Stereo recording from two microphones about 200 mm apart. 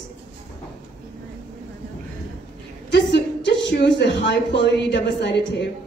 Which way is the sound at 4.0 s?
60° left (ahead or behind).